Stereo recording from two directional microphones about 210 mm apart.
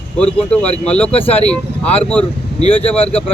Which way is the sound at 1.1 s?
30° left (ahead or behind).